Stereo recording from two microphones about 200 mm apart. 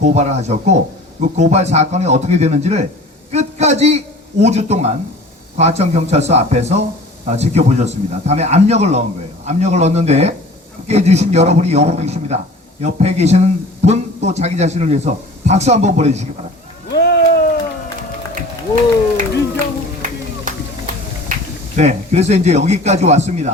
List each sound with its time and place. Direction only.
0.0 s a man's voice: 35° right (ahead or behind)
16.9 s a sound: 55° left (ahead or behind)
20.0 s run: 40° right (ahead or behind)
21.8 s a man's voice: 35° right (ahead or behind)